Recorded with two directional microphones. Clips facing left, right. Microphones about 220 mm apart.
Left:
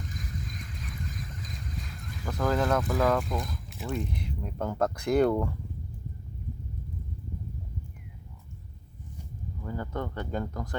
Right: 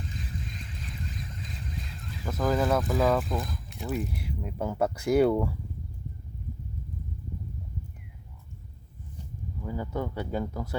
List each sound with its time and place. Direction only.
0.1 s boat: 30° right (ahead or behind)
2.2 s speech: 5° right (ahead or behind)
9.6 s speech: 10° right (ahead or behind)